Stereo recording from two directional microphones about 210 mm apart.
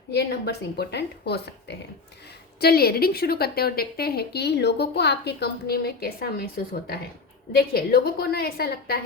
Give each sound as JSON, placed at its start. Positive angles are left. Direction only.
{"t": 0.1, "sound": "speech", "side_deg": 50}